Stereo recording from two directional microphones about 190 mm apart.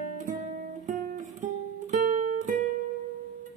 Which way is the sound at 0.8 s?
40° right (ahead or behind).